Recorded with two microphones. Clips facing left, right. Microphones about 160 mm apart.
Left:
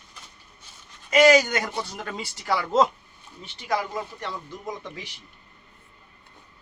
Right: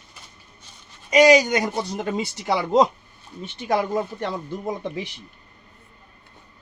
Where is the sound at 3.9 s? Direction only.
30° right (ahead or behind).